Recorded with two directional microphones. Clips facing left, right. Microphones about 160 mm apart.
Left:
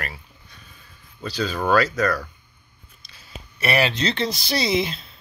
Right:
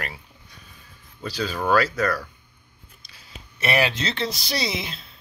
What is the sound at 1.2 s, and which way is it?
Speech, 10° right (ahead or behind).